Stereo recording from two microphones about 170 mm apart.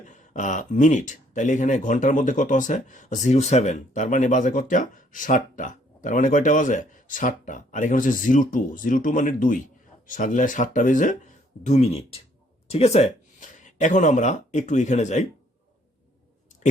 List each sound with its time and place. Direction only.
0.0 s speech: 45° left (ahead or behind)